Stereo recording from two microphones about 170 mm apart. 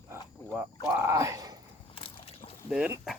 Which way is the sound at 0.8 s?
15° right (ahead or behind).